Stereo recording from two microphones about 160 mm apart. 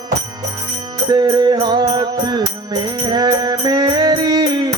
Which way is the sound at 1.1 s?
25° right (ahead or behind).